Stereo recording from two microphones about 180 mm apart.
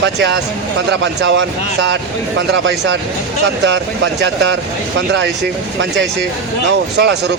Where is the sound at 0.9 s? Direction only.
90° right.